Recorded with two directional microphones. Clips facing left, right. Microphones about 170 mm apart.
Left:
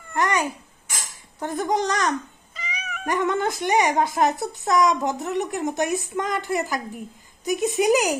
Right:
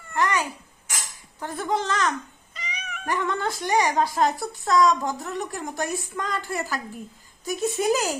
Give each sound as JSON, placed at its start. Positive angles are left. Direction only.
{"t": 0.1, "sound": "babbling", "side_deg": 20}
{"t": 1.4, "sound": "speech", "side_deg": 20}
{"t": 2.7, "sound": "cat", "side_deg": 5}
{"t": 3.1, "sound": "speech", "side_deg": 20}